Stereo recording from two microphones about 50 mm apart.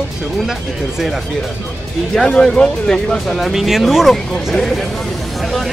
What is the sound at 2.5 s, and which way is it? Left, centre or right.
Speech, centre.